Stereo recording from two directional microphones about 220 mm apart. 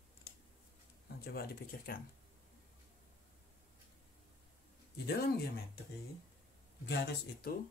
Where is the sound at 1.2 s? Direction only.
45° left (ahead or behind).